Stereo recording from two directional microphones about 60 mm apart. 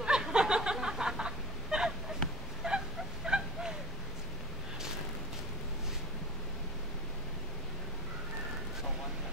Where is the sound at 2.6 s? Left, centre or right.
Centre.